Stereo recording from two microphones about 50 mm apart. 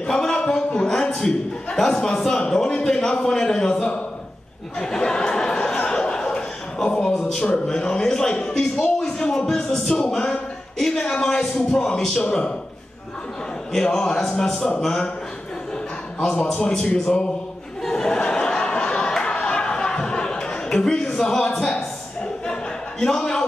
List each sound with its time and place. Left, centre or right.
0.1 s a sound: centre
1.1 s a man's voice: centre
5.8 s chuckle: centre
7.2 s a man's voice: centre
13.7 s a man's voice: centre
16.2 s a man's voice: left
17.8 s chatter: centre
22.5 s a sound: centre